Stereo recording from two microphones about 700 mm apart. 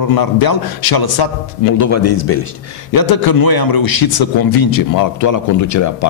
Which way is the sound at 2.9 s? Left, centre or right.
Left.